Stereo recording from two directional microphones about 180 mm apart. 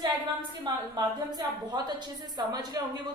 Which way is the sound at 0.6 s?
25° right (ahead or behind).